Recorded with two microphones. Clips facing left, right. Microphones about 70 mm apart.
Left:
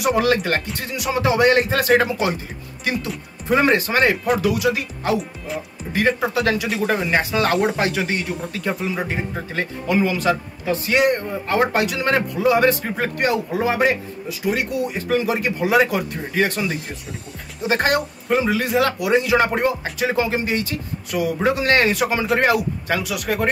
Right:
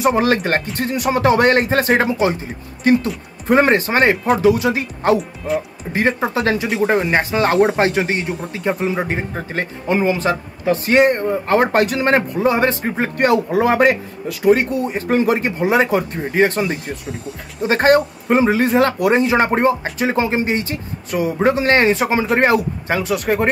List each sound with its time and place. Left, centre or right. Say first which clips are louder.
0.0 s speech: right 3 dB; right
6.3 s a man's voice: right 2 dB; right
13.2 s speech: right 7 dB; right
14.4 s a man's voice: right 7 dB; right